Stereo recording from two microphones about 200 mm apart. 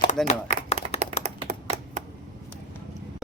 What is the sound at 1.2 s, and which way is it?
Computer keyboard, 30° right (ahead or behind).